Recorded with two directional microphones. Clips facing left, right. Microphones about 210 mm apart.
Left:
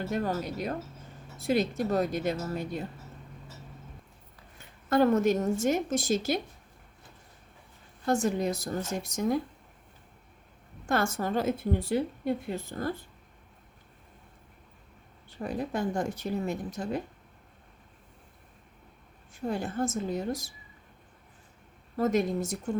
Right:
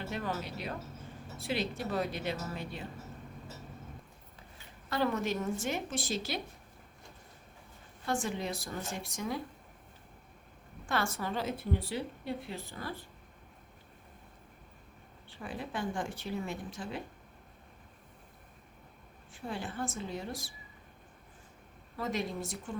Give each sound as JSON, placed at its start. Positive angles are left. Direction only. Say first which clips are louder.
{"t": 0.1, "sound": "speech", "louder": "left 6 dB", "side_deg": 45}
{"t": 4.9, "sound": "speech", "louder": "left 9 dB", "side_deg": 45}
{"t": 8.0, "sound": "speech", "louder": "left 7 dB", "side_deg": 40}
{"t": 10.8, "sound": "speech", "louder": "left 6 dB", "side_deg": 45}
{"t": 15.3, "sound": "speech", "louder": "left 8 dB", "side_deg": 40}
{"t": 19.3, "sound": "speech", "louder": "left 7 dB", "side_deg": 45}
{"t": 21.9, "sound": "speech", "louder": "left 9 dB", "side_deg": 45}